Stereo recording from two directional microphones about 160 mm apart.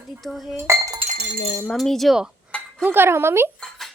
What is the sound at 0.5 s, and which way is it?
Speech, 15° right (ahead or behind).